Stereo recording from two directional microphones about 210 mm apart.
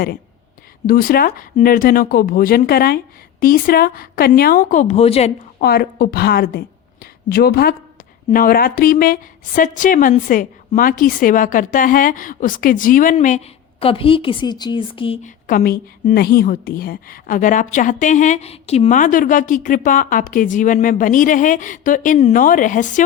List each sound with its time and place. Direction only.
0.9 s speech: 45° left (ahead or behind)
5.5 s a woman's voice: 50° left (ahead or behind)